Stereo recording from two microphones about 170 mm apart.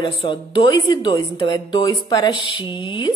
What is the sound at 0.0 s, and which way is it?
Speech, 30° left (ahead or behind).